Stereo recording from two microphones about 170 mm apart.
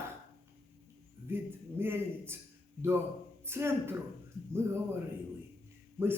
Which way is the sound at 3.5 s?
15° right (ahead or behind).